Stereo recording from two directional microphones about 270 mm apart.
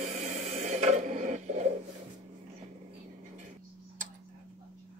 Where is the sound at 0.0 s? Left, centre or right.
Right.